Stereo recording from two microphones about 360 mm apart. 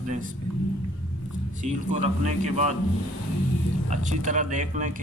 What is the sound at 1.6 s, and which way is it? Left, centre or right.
Speech, centre.